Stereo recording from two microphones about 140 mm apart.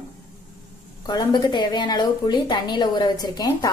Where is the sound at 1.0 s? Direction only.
30° left (ahead or behind).